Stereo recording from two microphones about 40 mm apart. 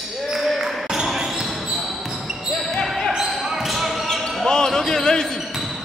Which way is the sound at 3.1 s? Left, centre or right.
Centre.